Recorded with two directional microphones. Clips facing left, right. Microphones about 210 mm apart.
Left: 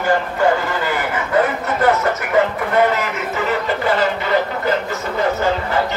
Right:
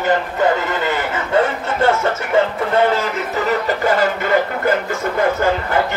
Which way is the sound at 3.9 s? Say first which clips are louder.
Right 1 dB; 50° right (ahead or behind).